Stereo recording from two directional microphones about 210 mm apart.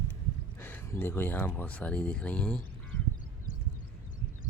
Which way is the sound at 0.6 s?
10° left (ahead or behind).